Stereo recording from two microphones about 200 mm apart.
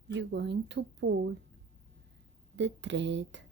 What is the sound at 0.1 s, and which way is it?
Speech, 60° right (ahead or behind).